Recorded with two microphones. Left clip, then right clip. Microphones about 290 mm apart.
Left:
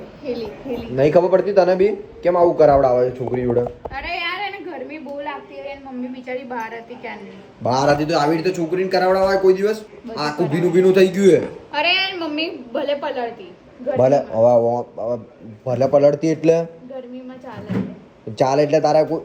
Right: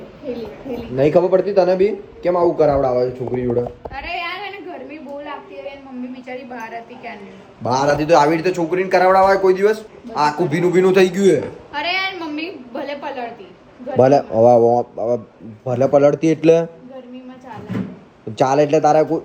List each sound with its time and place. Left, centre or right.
0.3 s a woman's voice: centre
9.2 s speech: right
9.5 s a man's voice: centre
12.0 s a sound: centre
13.9 s speech: right
15.6 s a man's voice: right
16.0 s a man's voice: centre
18.3 s a man's voice: centre
18.7 s speech: right